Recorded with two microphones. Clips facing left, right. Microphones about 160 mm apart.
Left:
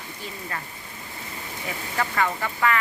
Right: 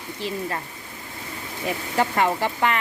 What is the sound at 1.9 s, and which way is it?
Speech, 30° right (ahead or behind).